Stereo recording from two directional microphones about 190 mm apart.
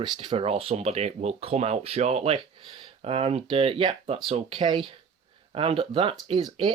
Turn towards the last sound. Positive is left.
turn(degrees=-25)  # may be behind; listen again after turning